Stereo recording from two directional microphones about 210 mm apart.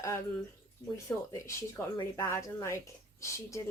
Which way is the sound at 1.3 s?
15° left (ahead or behind).